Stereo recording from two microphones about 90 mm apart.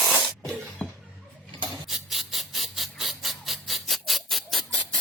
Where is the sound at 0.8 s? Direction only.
15° left (ahead or behind).